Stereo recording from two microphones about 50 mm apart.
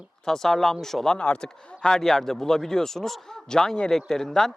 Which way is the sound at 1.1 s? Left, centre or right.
Left.